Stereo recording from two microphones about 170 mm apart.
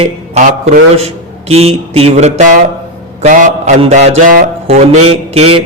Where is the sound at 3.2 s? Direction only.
45° right (ahead or behind).